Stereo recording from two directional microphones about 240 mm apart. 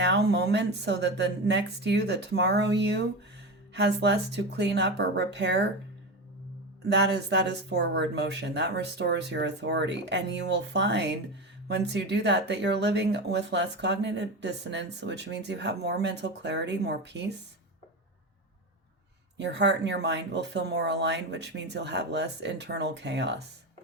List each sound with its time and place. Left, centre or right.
0.0 s speech: right
6.8 s speech: right
19.4 s speech: right